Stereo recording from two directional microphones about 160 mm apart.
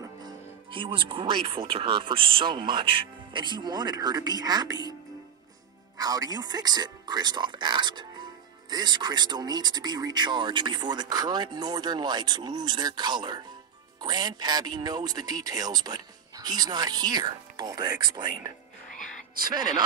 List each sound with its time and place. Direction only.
0.0 s speech: 30° right (ahead or behind)
5.9 s speech: 25° right (ahead or behind)